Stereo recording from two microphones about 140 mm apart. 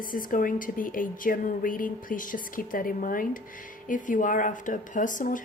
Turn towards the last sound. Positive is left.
turn(degrees=70)  # may be behind; listen again after turning